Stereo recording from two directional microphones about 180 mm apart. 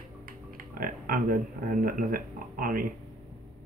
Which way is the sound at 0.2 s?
50° right (ahead or behind).